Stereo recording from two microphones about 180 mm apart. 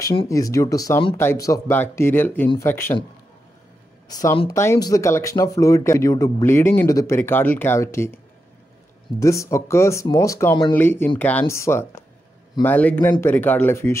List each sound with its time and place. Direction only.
0.3 s speech: 20° left (ahead or behind)
4.1 s speech: 20° left (ahead or behind)
9.2 s speech: 15° left (ahead or behind)